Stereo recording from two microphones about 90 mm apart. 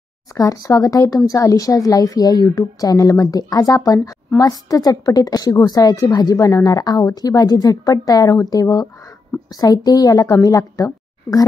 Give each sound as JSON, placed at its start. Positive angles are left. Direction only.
{"t": 0.3, "sound": "a woman's voice", "side_deg": 40}